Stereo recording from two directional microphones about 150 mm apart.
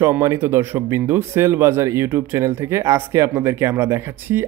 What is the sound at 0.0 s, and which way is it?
Speech, 20° right (ahead or behind).